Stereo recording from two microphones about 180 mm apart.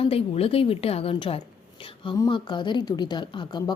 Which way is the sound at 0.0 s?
35° left (ahead or behind).